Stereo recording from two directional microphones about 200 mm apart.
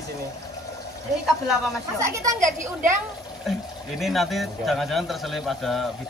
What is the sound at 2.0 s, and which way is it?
Speech, 15° right (ahead or behind).